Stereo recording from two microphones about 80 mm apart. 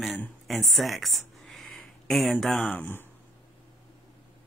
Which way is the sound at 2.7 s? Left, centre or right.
Left.